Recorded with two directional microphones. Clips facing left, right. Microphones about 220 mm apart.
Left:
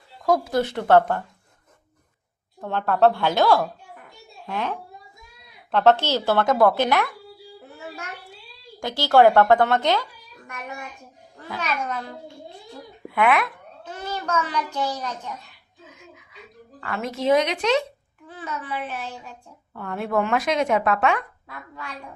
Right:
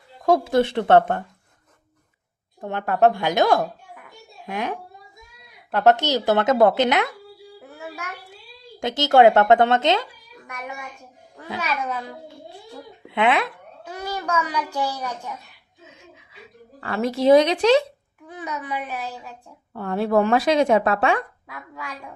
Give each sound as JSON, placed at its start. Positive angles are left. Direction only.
{"t": 0.3, "sound": "a woman's voice", "side_deg": -25}
{"t": 2.6, "sound": "a woman's voice", "side_deg": -15}
{"t": 8.8, "sound": "a woman's voice", "side_deg": -20}
{"t": 11.6, "sound": "a child's voice", "side_deg": -5}
{"t": 13.1, "sound": "speech", "side_deg": -25}
{"t": 13.8, "sound": "a child's voice", "side_deg": -10}
{"t": 15.9, "sound": "a sound", "side_deg": -30}
{"t": 18.3, "sound": "a child's voice", "side_deg": -15}
{"t": 19.7, "sound": "speech", "side_deg": -35}
{"t": 21.4, "sound": "a woman's voice", "side_deg": -10}